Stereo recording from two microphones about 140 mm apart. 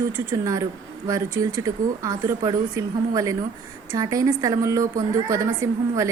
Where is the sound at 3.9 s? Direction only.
25° right (ahead or behind).